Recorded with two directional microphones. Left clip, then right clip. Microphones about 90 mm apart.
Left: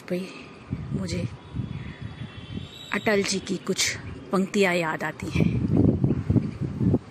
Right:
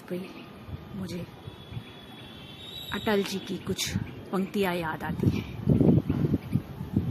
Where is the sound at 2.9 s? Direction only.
30° left (ahead or behind).